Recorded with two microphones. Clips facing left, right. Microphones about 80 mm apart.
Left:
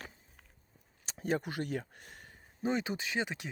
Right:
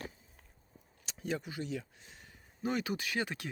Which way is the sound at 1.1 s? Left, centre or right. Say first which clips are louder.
Left 4 dB; left.